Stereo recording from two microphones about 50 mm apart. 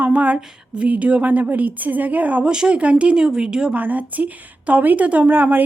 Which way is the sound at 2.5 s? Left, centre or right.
Centre.